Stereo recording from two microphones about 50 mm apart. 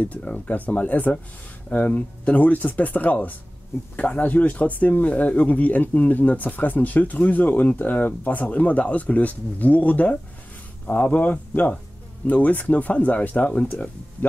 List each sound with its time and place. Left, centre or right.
0.2 s speech: left